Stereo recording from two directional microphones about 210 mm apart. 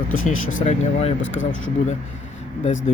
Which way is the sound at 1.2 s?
65° left (ahead or behind).